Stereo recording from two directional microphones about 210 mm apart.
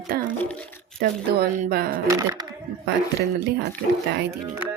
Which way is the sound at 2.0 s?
15° right (ahead or behind).